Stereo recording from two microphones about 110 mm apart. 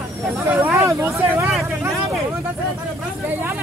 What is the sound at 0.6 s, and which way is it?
Speech, 20° right (ahead or behind).